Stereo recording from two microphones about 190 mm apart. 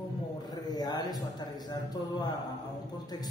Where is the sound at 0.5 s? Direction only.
20° left (ahead or behind).